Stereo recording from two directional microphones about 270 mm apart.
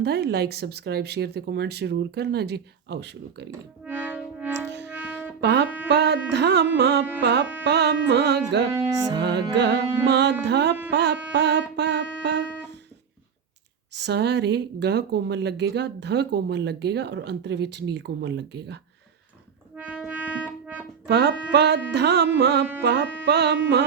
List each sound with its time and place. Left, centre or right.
0.0 s speech: right
3.8 s music: centre
4.7 s music: right
5.4 s speech: right
8.8 s music: centre
10.1 s speech: right
10.9 s music: right
13.9 s speech: right
19.7 s music: centre
21.1 s speech: right